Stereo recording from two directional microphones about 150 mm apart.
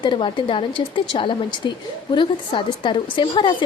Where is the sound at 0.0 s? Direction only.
35° left (ahead or behind).